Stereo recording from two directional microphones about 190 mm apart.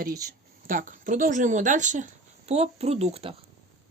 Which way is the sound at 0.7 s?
45° right (ahead or behind).